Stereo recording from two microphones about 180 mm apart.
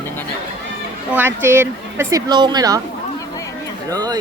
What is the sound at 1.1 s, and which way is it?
Speech, 10° right (ahead or behind).